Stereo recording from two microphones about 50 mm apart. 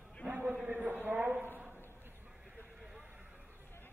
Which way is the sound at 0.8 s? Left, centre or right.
Right.